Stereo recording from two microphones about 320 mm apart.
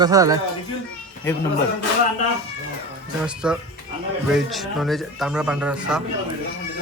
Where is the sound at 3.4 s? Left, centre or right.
Centre.